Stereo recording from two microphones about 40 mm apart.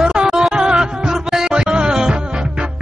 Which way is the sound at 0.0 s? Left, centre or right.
Centre.